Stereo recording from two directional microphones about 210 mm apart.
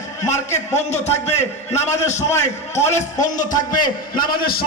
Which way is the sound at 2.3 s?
15° left (ahead or behind).